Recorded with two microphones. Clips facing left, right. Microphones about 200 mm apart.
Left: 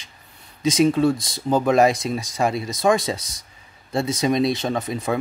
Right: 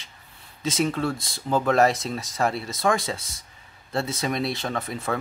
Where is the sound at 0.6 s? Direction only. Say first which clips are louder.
Left 7 dB; 15° left (ahead or behind).